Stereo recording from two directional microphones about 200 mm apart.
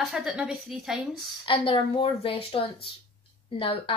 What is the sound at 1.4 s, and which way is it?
A woman's voice, 25° left (ahead or behind).